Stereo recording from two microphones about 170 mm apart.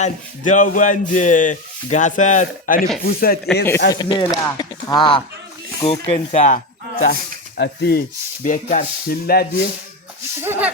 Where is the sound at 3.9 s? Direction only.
25° left (ahead or behind).